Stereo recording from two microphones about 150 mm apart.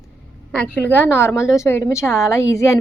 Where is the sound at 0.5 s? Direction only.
10° left (ahead or behind).